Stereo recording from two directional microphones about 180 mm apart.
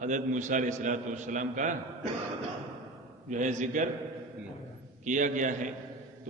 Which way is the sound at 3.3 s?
45° right (ahead or behind).